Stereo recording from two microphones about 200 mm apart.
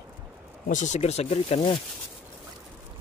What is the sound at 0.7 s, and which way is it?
Speech, 40° left (ahead or behind).